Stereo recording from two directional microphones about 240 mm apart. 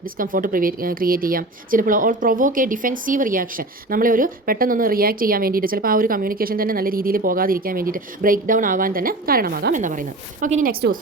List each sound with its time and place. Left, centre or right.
0.0 s speech: right